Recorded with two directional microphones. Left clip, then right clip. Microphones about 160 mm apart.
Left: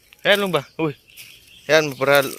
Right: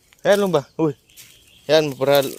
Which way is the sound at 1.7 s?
35° right (ahead or behind).